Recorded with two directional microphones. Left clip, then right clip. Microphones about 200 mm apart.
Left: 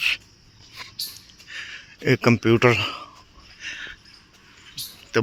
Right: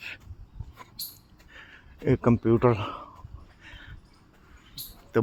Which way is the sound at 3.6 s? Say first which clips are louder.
Left 15 dB; 15° right (ahead or behind).